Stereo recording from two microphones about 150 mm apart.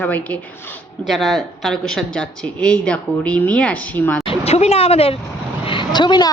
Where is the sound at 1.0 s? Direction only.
Centre (ahead or behind).